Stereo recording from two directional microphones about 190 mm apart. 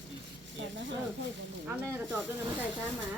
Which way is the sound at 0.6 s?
75° right (ahead or behind).